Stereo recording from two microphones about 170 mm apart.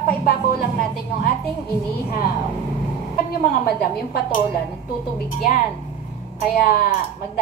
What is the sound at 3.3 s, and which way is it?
A woman's voice, 65° left (ahead or behind).